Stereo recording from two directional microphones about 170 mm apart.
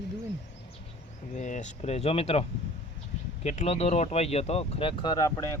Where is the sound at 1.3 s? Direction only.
45° left (ahead or behind).